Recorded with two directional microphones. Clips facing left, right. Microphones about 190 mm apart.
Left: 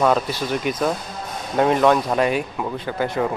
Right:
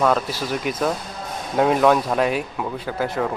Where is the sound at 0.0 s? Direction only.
Centre (ahead or behind).